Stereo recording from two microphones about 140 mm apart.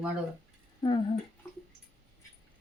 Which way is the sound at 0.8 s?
30° left (ahead or behind).